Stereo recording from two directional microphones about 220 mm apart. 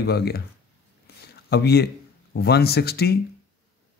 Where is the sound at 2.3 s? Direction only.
45° left (ahead or behind).